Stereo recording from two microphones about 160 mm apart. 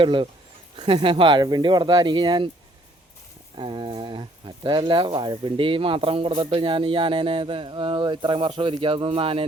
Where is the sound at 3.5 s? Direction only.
30° right (ahead or behind).